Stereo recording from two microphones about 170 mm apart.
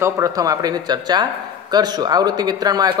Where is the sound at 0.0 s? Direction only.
20° right (ahead or behind).